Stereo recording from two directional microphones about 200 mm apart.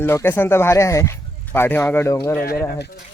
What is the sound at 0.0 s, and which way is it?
Speech, 10° left (ahead or behind).